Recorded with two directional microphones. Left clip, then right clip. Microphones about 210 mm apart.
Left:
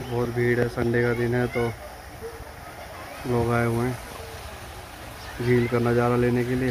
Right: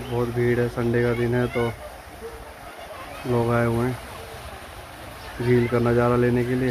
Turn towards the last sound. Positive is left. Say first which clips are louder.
# right 2 dB
turn(degrees=5)  # may be behind; listen again after turning